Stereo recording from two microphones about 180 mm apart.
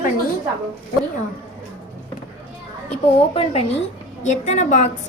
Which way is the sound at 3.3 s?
35° left (ahead or behind).